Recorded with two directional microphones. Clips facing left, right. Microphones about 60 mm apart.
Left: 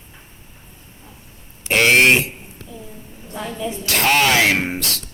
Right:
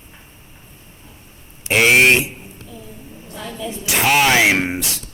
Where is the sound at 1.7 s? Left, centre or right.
Centre.